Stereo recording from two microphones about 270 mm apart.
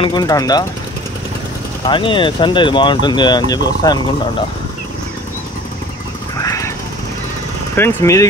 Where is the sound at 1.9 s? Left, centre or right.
Centre.